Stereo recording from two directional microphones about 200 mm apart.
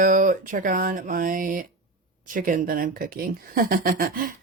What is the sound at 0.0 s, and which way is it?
Speech, 40° right (ahead or behind).